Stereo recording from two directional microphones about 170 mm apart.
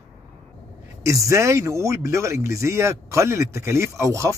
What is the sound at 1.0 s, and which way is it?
A man's voice, 20° right (ahead or behind).